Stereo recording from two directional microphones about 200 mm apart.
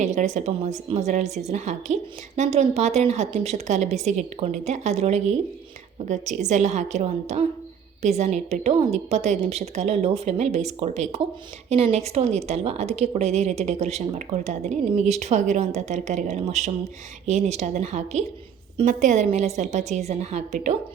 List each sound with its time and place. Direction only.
0.0 s a woman's voice: 35° right (ahead or behind)